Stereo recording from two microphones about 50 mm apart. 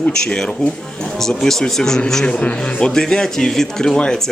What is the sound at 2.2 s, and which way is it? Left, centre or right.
Speech, centre.